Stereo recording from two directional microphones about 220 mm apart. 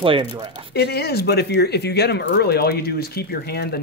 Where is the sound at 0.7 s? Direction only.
45° left (ahead or behind).